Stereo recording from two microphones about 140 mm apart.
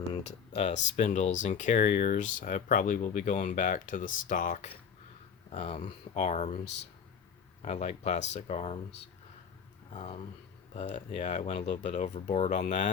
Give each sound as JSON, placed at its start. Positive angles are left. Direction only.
{"t": 0.3, "sound": "speech", "side_deg": 50}
{"t": 5.5, "sound": "speech", "side_deg": 50}
{"t": 7.6, "sound": "speech", "side_deg": 55}
{"t": 9.9, "sound": "speech", "side_deg": 55}